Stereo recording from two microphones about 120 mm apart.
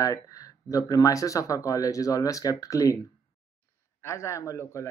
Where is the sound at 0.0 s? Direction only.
30° left (ahead or behind).